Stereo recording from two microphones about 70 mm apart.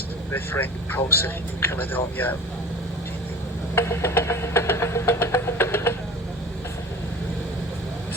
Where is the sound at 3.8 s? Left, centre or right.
Left.